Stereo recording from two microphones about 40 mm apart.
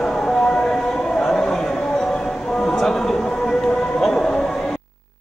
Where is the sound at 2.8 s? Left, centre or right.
Centre.